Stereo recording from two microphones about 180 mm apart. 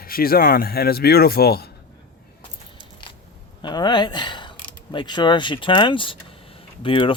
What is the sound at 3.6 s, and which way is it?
Speech, 25° left (ahead or behind).